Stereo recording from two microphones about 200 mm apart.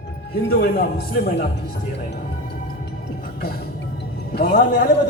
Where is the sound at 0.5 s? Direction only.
45° left (ahead or behind).